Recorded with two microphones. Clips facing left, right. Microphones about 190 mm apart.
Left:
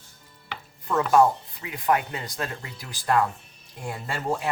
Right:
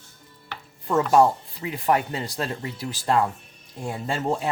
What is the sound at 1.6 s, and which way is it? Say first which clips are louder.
Speech: right 2 dB; 30° right (ahead or behind).